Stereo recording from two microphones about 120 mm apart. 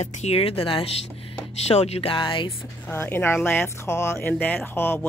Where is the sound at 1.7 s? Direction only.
60° left (ahead or behind); by 2.5 s 45° left (ahead or behind).